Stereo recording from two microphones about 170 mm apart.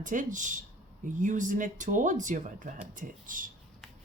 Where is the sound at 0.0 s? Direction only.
50° right (ahead or behind).